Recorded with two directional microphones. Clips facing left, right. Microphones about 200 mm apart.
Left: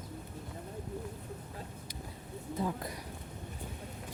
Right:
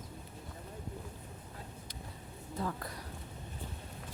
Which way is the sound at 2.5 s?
15° left (ahead or behind).